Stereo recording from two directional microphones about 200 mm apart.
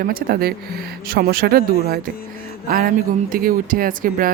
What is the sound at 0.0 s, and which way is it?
Speech, 45° right (ahead or behind).